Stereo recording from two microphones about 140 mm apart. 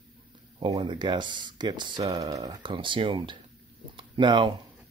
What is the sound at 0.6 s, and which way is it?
Speech, 35° right (ahead or behind).